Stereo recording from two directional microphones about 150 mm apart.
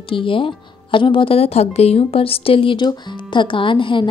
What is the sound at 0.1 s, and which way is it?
A woman's voice, 35° left (ahead or behind).